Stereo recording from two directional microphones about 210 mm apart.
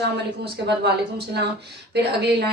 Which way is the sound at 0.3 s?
50° right (ahead or behind).